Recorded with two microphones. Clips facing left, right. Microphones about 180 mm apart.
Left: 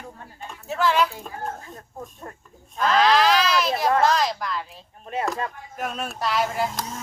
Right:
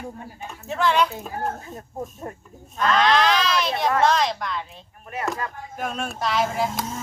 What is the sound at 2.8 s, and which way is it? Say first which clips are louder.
Speech: left 1 dB; centre (ahead or behind).